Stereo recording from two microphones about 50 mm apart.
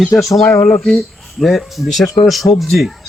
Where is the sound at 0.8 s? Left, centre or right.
Centre.